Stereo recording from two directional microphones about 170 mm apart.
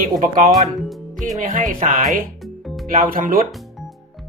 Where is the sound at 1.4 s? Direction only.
50° right (ahead or behind).